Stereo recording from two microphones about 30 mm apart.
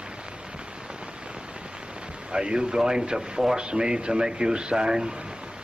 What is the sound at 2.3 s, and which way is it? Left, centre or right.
Speech, right.